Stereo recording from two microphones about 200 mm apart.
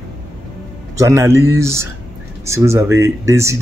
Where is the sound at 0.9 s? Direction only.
15° right (ahead or behind).